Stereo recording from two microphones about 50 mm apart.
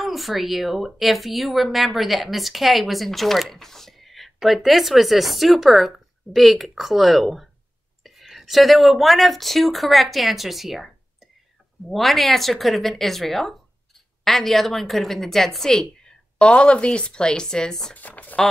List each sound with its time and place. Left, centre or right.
0.0 s speech: centre
11.9 s a woman's voice: centre
17.9 s speech: left